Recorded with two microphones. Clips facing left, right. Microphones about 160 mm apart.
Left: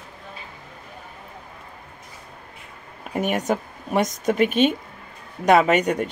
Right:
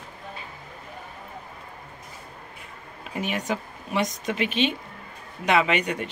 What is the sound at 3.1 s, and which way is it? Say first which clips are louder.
Speech: left 6 dB; 50° left (ahead or behind).